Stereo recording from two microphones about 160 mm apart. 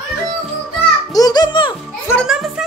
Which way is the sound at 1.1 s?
25° left (ahead or behind).